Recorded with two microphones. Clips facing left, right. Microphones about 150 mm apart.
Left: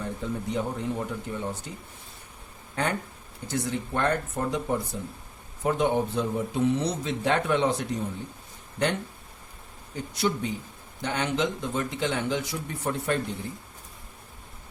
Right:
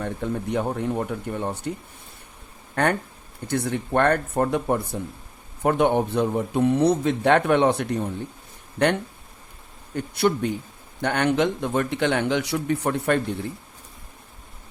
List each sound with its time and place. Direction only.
0.0 s speech: 60° right (ahead or behind)
2.8 s speech: 65° right (ahead or behind)
9.9 s speech: 60° right (ahead or behind)